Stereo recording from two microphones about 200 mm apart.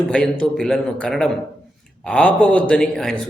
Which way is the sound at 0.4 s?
5° left (ahead or behind).